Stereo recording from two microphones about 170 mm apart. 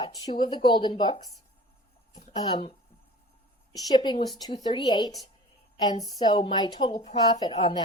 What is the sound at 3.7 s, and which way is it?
Speech, 25° left (ahead or behind).